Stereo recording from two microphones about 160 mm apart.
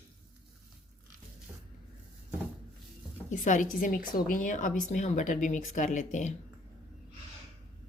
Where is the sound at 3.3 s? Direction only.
50° left (ahead or behind).